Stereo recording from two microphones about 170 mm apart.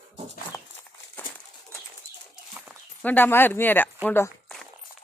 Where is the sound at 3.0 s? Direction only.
10° left (ahead or behind).